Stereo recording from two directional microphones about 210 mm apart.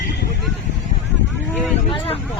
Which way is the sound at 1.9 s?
25° left (ahead or behind).